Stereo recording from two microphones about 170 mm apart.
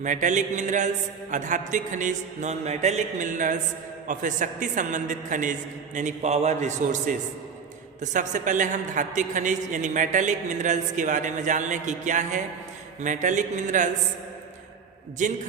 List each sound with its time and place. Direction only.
0.0 s a woman's voice: 45° right (ahead or behind)
15.2 s a woman's voice: 45° right (ahead or behind)